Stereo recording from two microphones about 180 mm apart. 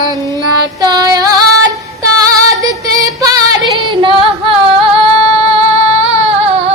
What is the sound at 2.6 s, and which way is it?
Music, 20° right (ahead or behind).